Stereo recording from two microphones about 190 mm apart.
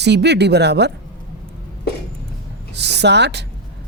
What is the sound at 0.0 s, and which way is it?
Speech, 60° right (ahead or behind).